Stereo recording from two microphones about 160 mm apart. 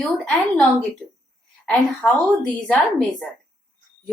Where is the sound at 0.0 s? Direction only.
15° left (ahead or behind).